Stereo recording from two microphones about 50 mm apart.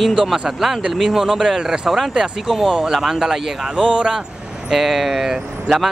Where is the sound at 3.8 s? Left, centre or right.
Centre.